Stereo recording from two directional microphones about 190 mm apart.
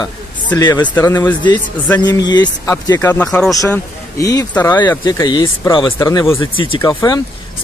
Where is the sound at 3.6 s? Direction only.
15° left (ahead or behind).